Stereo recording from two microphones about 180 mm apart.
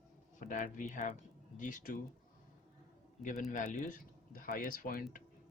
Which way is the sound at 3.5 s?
45° left (ahead or behind).